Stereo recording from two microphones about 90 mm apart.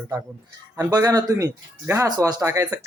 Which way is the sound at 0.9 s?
45° right (ahead or behind).